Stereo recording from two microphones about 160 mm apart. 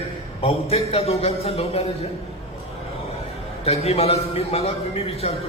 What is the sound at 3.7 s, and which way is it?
A man's voice, 40° left (ahead or behind).